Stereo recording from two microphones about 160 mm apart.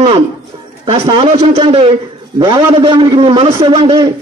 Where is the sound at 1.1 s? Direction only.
35° right (ahead or behind).